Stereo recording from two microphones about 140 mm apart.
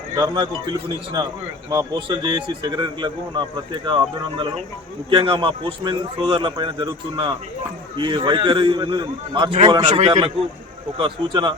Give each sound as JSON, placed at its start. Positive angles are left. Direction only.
{"t": 0.2, "sound": "a man's voice", "side_deg": -35}
{"t": 5.1, "sound": "a man's voice", "side_deg": -35}